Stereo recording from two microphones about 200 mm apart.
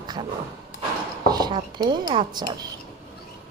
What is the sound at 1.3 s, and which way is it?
Speech, 20° right (ahead or behind).